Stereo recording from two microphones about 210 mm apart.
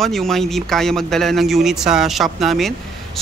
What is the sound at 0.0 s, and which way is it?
Speech, centre (ahead or behind).